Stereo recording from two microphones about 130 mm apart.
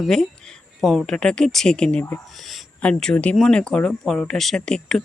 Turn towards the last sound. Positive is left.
turn(degrees=5)  # may be behind; listen again after turning